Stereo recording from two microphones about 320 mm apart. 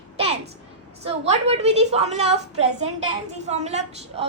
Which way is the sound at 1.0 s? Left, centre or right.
Centre.